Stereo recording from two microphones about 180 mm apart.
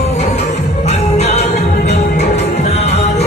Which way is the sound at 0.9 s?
35° left (ahead or behind).